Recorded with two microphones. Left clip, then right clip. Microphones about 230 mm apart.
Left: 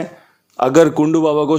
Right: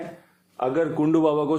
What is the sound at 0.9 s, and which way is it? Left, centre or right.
Speech, centre.